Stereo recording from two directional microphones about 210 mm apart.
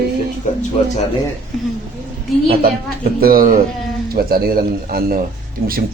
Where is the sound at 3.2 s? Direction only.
45° right (ahead or behind).